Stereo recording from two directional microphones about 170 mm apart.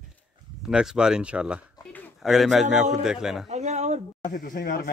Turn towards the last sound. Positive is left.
turn(degrees=60)  # may be behind; listen again after turning